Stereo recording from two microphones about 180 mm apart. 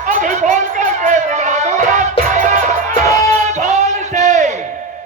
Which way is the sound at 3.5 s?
40° right (ahead or behind).